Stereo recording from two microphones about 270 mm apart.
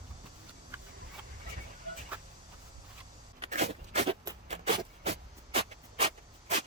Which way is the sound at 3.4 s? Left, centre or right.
Right.